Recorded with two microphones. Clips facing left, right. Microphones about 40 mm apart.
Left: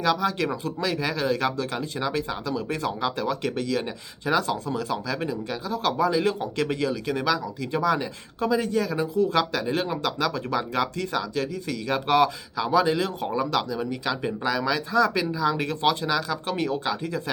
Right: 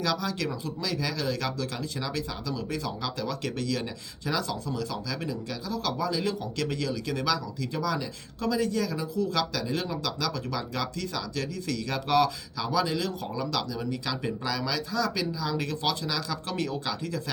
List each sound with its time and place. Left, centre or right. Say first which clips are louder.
0.0 s speech: left 5 dB; left
3.4 s speech: left 4 dB; centre
4.3 s speech: left 6 dB; left
7.1 s speech: left 4 dB; centre
7.7 s speech: left 7 dB; left
9.0 s speech: left 6 dB; left